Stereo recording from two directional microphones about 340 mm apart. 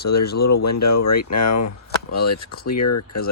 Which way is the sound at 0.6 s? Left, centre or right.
Left.